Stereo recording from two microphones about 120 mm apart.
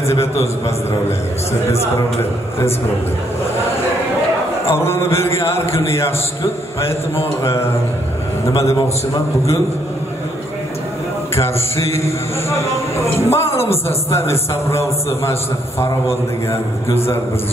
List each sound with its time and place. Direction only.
0.0 s a man's voice: 25° left (ahead or behind)
4.6 s a man's voice: 20° left (ahead or behind)
7.4 s a man's voice: 20° left (ahead or behind)
11.3 s a man's voice: 25° left (ahead or behind)